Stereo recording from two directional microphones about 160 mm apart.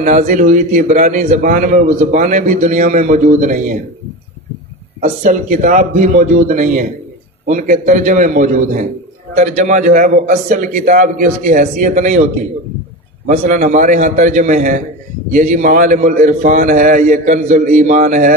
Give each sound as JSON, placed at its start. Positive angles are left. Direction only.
{"t": 0.0, "sound": "a man's voice", "side_deg": -55}
{"t": 5.0, "sound": "a man's voice", "side_deg": -50}
{"t": 13.3, "sound": "a man's voice", "side_deg": -50}